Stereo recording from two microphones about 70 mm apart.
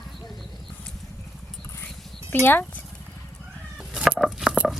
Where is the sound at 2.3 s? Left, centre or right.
Left.